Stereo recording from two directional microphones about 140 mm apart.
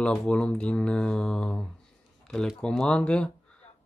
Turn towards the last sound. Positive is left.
turn(degrees=5)  # may be behind; listen again after turning